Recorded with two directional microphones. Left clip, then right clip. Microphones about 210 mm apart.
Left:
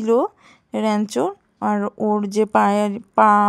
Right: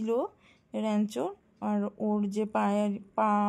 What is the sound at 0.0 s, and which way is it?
Speech, 20° left (ahead or behind).